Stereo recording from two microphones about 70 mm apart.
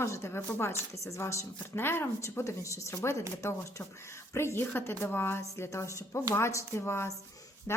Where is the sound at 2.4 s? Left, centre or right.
Left.